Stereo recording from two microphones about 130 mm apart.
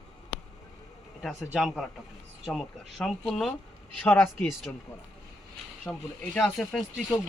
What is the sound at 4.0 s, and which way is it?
Speech, 15° left (ahead or behind).